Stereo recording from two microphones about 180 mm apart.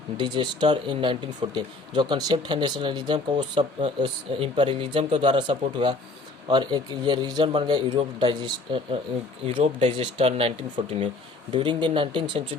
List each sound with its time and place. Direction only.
0.2 s speech: 25° right (ahead or behind)